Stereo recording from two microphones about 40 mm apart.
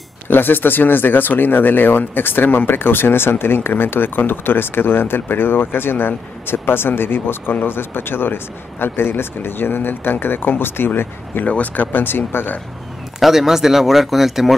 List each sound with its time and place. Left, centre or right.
0.3 s speech: left
11.4 s speech: left
13.2 s speech: centre